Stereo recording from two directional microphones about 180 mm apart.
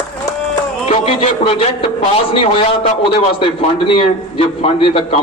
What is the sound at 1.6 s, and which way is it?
A man's voice, 30° left (ahead or behind).